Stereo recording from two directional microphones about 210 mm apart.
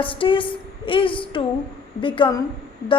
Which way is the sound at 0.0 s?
25° left (ahead or behind).